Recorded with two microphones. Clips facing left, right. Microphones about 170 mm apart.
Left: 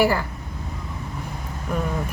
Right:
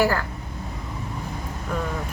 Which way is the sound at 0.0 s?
10° left (ahead or behind).